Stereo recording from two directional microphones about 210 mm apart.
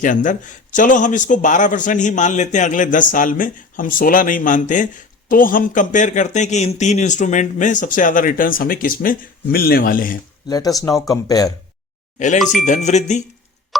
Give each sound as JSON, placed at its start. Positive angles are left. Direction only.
{"t": 0.0, "sound": "speech", "side_deg": 40}
{"t": 10.5, "sound": "speech", "side_deg": 15}
{"t": 12.4, "sound": "speech", "side_deg": 0}
{"t": 12.6, "sound": "speech", "side_deg": 35}